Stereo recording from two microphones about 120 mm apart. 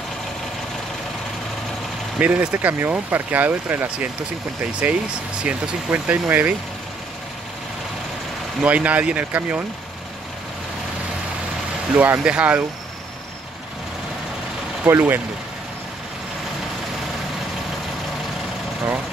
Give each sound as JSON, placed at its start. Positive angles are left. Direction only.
{"t": 2.1, "sound": "speech", "side_deg": -10}
{"t": 5.4, "sound": "speech", "side_deg": -10}
{"t": 8.6, "sound": "speech", "side_deg": -10}
{"t": 11.9, "sound": "speech", "side_deg": -10}
{"t": 14.9, "sound": "speech", "side_deg": -15}